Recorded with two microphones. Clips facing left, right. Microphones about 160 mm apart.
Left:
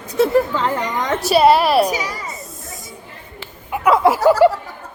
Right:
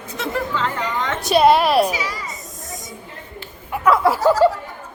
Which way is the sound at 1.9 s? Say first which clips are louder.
Left 2 dB; 40° left (ahead or behind).